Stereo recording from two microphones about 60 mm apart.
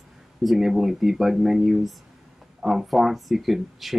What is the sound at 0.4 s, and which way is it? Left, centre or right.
Speech, centre.